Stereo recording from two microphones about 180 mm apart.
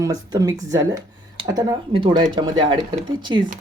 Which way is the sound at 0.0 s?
20° right (ahead or behind).